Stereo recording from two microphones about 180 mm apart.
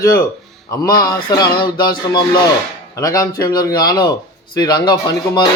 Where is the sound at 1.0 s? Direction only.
25° left (ahead or behind).